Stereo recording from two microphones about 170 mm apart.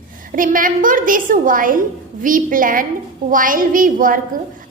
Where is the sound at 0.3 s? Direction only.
55° right (ahead or behind).